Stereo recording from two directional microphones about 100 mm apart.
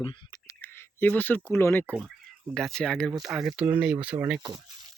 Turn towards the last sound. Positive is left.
turn(degrees=-10)  # may be behind; listen again after turning